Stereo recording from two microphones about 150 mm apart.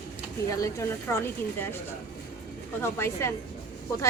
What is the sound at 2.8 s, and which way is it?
Speech, 15° left (ahead or behind).